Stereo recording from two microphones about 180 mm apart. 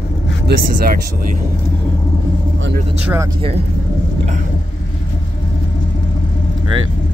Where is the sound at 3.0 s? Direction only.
10° right (ahead or behind).